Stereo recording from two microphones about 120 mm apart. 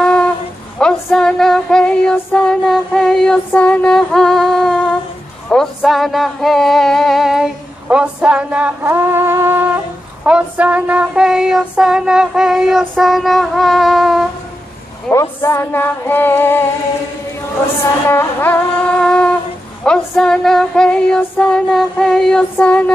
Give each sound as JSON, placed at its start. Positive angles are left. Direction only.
{"t": 0.0, "sound": "a sound", "side_deg": 5}
{"t": 0.7, "sound": "female singing", "side_deg": 5}
{"t": 5.8, "sound": "female singing", "side_deg": 0}
{"t": 8.8, "sound": "wind instrument", "side_deg": -20}
{"t": 10.2, "sound": "female singing", "side_deg": -10}
{"t": 15.0, "sound": "female singing", "side_deg": 20}
{"t": 18.0, "sound": "female singing", "side_deg": 20}
{"t": 18.9, "sound": "a sound", "side_deg": 5}
{"t": 19.8, "sound": "female singing", "side_deg": 5}